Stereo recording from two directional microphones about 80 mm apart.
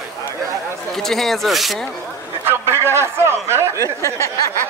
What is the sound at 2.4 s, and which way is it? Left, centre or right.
A man's voice, right.